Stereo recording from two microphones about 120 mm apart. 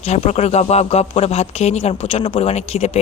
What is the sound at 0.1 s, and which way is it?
Speech, 65° left (ahead or behind).